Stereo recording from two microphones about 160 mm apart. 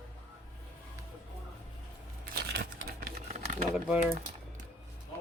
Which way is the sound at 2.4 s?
90° right.